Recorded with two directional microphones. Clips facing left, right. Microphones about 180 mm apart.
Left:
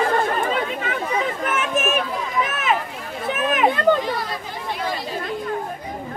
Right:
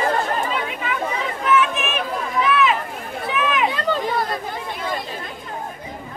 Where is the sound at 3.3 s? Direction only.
50° left (ahead or behind).